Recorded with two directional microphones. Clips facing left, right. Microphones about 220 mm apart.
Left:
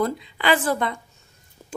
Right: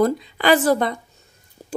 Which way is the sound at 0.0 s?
40° right (ahead or behind).